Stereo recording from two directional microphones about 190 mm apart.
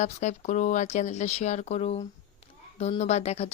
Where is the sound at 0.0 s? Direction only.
40° left (ahead or behind).